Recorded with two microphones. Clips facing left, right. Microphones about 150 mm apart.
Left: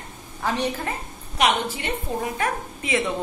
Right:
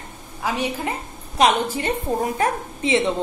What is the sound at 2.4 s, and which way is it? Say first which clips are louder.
Speech: right 4 dB; 25° right (ahead or behind).